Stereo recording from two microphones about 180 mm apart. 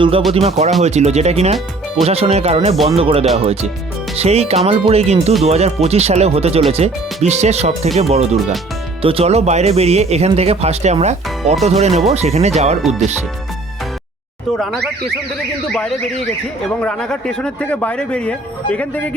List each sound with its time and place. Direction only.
0.3 s speech: 35° right (ahead or behind)
14.5 s speech: centre (ahead or behind)
16.8 s speech: 5° left (ahead or behind)